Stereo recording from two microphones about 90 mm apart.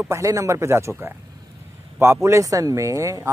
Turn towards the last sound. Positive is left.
turn(degrees=-35)  # may be behind; listen again after turning